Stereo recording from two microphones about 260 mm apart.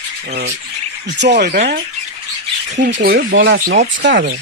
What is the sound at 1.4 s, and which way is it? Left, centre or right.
Speech, right.